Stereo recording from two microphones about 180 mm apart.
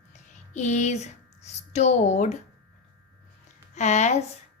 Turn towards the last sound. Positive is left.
turn(degrees=40)  # may be behind; listen again after turning